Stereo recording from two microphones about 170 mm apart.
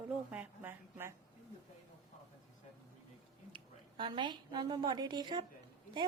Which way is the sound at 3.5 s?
30° right (ahead or behind).